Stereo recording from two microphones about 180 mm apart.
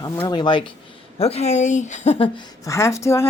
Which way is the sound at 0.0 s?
25° left (ahead or behind).